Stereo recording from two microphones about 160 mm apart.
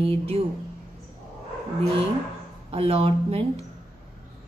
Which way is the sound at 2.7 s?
35° right (ahead or behind).